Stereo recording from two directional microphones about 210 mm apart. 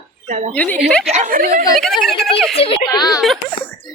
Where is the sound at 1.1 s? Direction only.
35° right (ahead or behind).